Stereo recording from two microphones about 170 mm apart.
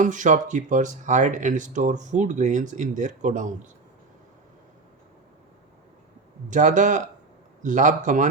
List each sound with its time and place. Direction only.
0.0 s speech: 50° right (ahead or behind)
6.5 s speech: 45° right (ahead or behind)